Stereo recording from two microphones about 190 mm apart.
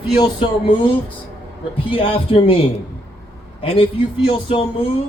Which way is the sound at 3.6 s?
30° left (ahead or behind).